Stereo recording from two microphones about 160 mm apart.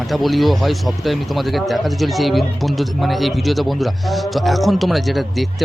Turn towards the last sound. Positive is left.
turn(degrees=0)  # may be behind; listen again after turning